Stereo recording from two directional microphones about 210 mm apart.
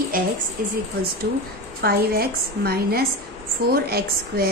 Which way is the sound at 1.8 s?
45° right (ahead or behind).